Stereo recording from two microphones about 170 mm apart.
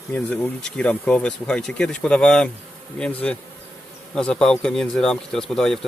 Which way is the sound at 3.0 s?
10° left (ahead or behind).